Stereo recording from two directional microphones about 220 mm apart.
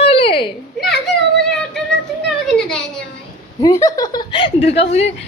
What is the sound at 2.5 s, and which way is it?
Speech, 5° left (ahead or behind).